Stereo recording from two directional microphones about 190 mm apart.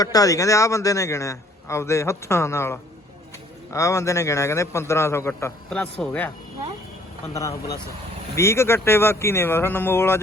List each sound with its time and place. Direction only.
0.0 s a man's voice: 20° left (ahead or behind)
7.3 s a man's voice: 15° left (ahead or behind)